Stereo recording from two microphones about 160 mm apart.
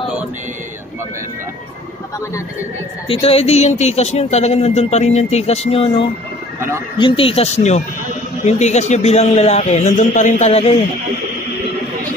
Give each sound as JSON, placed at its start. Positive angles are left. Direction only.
{"t": 3.1, "sound": "a man's voice", "side_deg": 40}